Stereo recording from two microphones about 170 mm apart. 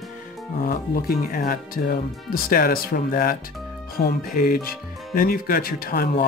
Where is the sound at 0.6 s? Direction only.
60° left (ahead or behind).